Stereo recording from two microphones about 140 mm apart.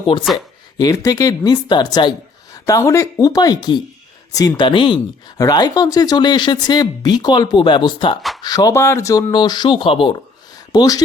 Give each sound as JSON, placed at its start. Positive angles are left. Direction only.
{"t": 0.1, "sound": "speech", "side_deg": 35}
{"t": 10.7, "sound": "speech", "side_deg": 25}